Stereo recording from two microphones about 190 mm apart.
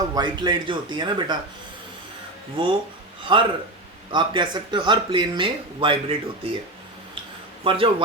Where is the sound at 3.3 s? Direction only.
25° right (ahead or behind).